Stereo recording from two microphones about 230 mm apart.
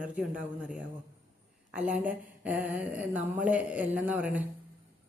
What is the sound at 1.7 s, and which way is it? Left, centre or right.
A woman's voice, centre.